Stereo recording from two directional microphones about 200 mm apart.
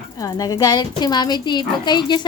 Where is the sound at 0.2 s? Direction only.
20° left (ahead or behind).